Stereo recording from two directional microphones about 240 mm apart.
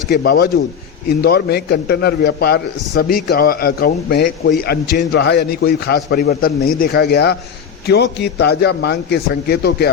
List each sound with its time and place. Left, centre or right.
0.1 s a man's voice: left